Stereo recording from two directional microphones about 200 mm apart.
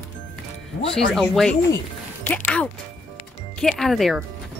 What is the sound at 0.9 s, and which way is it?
Speech, centre (ahead or behind).